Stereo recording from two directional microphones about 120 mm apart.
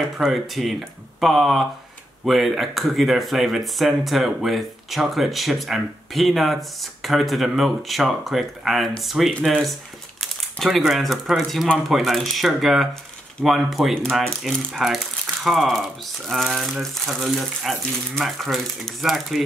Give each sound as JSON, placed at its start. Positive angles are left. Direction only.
{"t": 0.0, "sound": "speech", "side_deg": 0}